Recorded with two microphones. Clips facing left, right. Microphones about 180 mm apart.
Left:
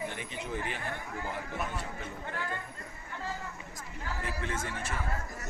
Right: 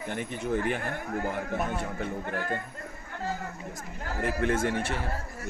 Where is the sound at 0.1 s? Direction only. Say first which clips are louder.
Right 8 dB; 50° right (ahead or behind); by 5.0 s 70° right (ahead or behind).